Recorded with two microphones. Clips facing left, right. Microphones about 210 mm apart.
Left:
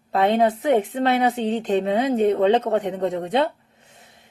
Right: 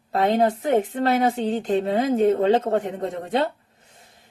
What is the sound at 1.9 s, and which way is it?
Speech, 40° right (ahead or behind).